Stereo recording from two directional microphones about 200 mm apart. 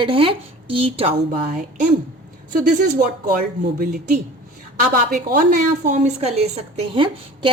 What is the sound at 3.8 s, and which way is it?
A woman's voice, 45° right (ahead or behind).